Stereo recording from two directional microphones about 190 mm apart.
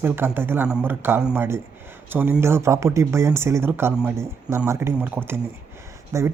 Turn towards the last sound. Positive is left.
turn(degrees=-15)  # may be behind; listen again after turning